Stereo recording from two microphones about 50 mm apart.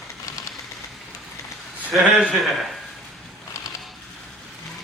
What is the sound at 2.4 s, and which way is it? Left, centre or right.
Speech, centre.